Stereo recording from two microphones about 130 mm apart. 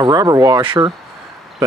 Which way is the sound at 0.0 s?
30° right (ahead or behind).